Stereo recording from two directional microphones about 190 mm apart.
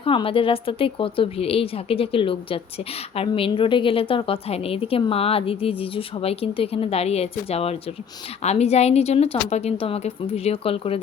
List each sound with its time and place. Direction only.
0.0 s a woman's voice: 25° left (ahead or behind)